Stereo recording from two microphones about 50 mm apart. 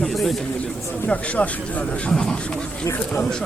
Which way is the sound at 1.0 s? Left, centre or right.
Left.